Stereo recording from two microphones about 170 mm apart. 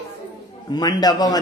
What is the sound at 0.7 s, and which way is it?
Speech, 25° left (ahead or behind).